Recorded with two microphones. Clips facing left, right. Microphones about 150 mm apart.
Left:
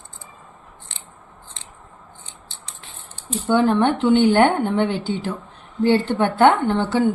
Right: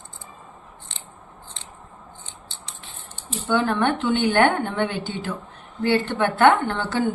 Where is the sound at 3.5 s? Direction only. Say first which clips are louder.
Left 4 dB; 20° left (ahead or behind).